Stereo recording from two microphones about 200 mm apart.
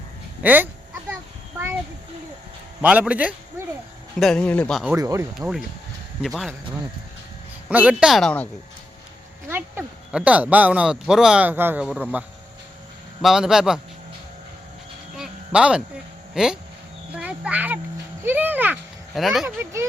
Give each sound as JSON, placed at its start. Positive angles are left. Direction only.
{"t": 0.4, "sound": "speech", "side_deg": -10}
{"t": 2.8, "sound": "speech", "side_deg": -5}
{"t": 4.2, "sound": "speech", "side_deg": 5}
{"t": 4.9, "sound": "speech", "side_deg": -15}
{"t": 6.2, "sound": "speech", "side_deg": 0}
{"t": 7.7, "sound": "speech", "side_deg": -5}
{"t": 9.5, "sound": "speech", "side_deg": -10}
{"t": 13.2, "sound": "speech", "side_deg": 0}
{"t": 15.1, "sound": "a sound", "side_deg": -5}
{"t": 16.3, "sound": "speech", "side_deg": -5}
{"t": 17.1, "sound": "children playing", "side_deg": -5}
{"t": 18.2, "sound": "speech", "side_deg": -10}